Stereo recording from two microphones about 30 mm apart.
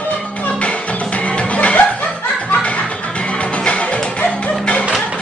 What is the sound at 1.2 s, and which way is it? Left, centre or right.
Music, left.